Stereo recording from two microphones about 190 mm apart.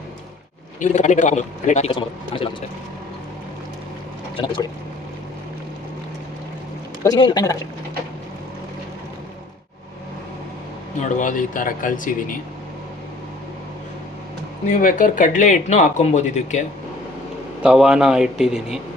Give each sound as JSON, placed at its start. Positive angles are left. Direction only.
{"t": 0.8, "sound": "speech", "side_deg": 40}
{"t": 1.9, "sound": "speech", "side_deg": 25}
{"t": 4.4, "sound": "speech", "side_deg": 30}
{"t": 7.0, "sound": "speech", "side_deg": 20}
{"t": 11.1, "sound": "speech", "side_deg": 45}
{"t": 14.7, "sound": "speech", "side_deg": 45}
{"t": 17.6, "sound": "a man's voice", "side_deg": -5}